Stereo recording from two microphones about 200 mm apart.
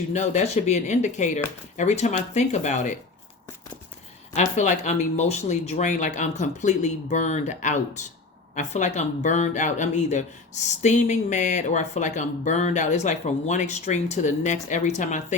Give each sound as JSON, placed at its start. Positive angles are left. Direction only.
{"t": 0.1, "sound": "speech", "side_deg": 35}
{"t": 4.4, "sound": "speech", "side_deg": 35}